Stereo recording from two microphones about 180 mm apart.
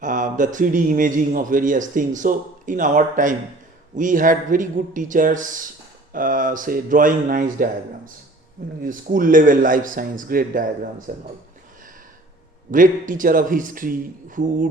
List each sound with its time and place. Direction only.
0.0 s a man's voice: 45° right (ahead or behind)
12.7 s a man's voice: 45° right (ahead or behind)